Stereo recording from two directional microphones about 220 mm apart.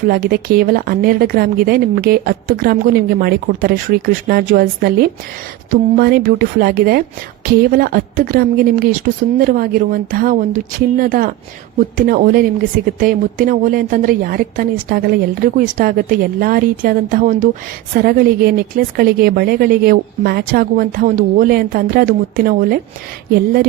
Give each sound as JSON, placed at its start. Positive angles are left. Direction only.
{"t": 0.1, "sound": "a woman's voice", "side_deg": -40}